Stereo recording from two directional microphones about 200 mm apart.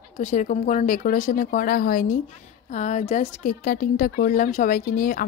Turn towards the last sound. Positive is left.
turn(degrees=45)  # may be behind; listen again after turning